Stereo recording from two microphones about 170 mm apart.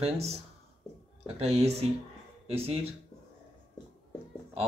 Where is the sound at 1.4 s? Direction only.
35° right (ahead or behind).